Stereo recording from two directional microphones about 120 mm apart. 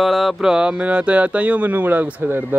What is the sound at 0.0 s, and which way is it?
Speech, centre (ahead or behind).